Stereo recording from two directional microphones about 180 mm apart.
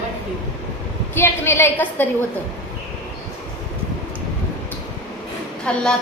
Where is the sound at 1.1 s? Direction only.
15° left (ahead or behind).